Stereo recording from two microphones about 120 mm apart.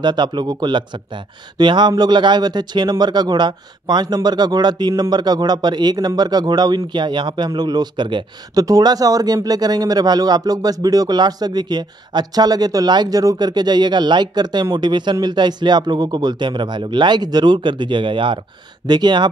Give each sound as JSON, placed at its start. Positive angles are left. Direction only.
{"t": 0.0, "sound": "speech", "side_deg": -35}